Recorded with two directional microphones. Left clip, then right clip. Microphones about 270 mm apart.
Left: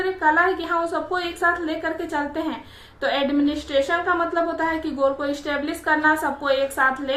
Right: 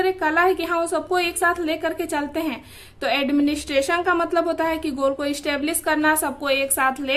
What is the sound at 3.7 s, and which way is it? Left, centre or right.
A woman's voice, right.